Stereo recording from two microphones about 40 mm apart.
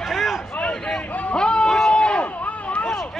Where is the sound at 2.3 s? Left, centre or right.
Left.